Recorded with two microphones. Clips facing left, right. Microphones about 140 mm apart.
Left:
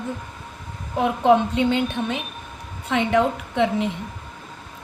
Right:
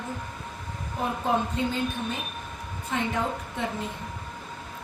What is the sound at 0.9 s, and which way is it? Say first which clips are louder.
A woman's voice: left 9 dB; 85° left.